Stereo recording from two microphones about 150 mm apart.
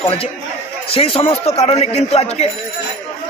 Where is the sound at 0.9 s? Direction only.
40° left (ahead or behind).